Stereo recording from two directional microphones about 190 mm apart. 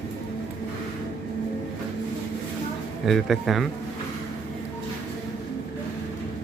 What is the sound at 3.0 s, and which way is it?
Speech, centre (ahead or behind).